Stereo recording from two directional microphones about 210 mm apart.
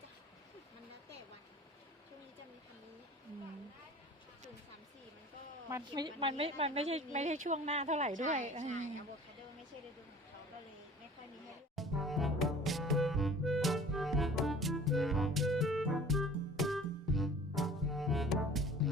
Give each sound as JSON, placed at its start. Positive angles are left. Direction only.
{"t": 5.6, "sound": "a woman's voice", "side_deg": -20}
{"t": 11.8, "sound": "music", "side_deg": 0}